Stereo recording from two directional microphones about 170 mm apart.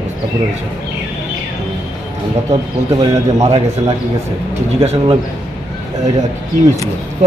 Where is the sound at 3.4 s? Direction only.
40° right (ahead or behind).